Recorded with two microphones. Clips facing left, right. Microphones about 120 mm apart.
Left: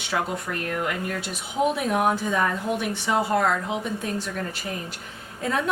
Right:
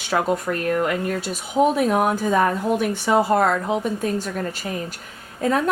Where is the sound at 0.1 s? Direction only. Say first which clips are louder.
Right 6 dB; 45° right (ahead or behind).